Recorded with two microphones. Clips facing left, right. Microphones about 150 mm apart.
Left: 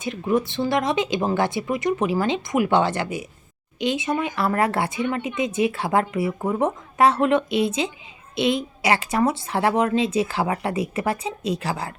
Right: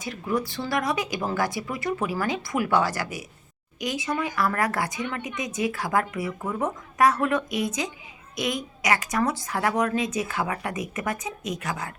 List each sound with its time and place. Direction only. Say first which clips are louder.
0.0 s speech: left 5 dB; 20° left (ahead or behind)